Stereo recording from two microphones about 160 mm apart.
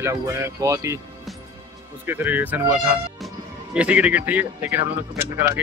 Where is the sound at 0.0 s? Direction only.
15° right (ahead or behind).